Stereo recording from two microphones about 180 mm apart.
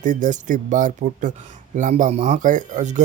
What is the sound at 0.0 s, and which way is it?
Speech, 45° right (ahead or behind).